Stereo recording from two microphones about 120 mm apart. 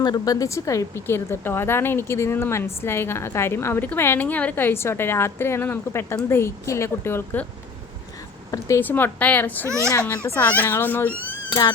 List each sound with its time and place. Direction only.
0.0 s speech: 35° left (ahead or behind)
8.4 s a woman's voice: 25° left (ahead or behind)
11.4 s speech: 35° left (ahead or behind)